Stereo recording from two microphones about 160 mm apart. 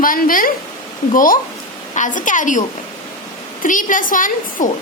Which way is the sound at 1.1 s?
60° left (ahead or behind).